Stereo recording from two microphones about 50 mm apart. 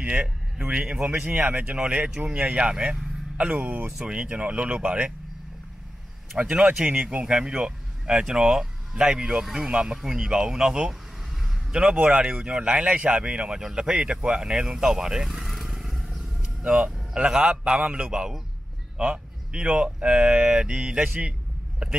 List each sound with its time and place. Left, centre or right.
0.0 s a man's voice: right
1.1 s speech: right
6.5 s speech: right
16.6 s speech: centre
21.1 s vehicle: right